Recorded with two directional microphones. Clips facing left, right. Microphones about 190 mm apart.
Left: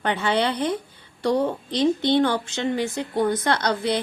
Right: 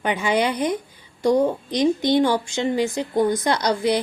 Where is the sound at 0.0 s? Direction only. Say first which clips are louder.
Right 1 dB; 10° right (ahead or behind).